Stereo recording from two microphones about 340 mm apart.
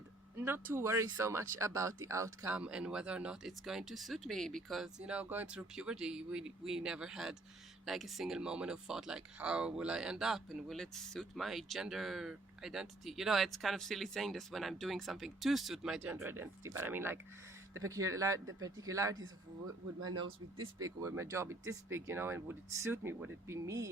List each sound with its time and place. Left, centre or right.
0.3 s speech: centre